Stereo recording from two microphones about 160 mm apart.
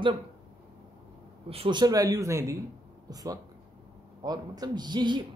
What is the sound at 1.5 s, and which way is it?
Speech, 35° right (ahead or behind).